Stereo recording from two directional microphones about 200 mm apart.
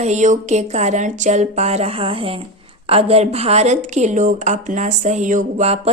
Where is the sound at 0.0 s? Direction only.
35° right (ahead or behind).